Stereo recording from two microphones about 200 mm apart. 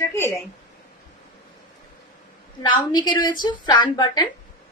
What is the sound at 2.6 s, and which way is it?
A woman's voice, 20° left (ahead or behind).